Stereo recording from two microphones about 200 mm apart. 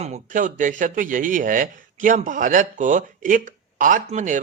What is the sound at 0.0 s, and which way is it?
A man's voice, 40° right (ahead or behind).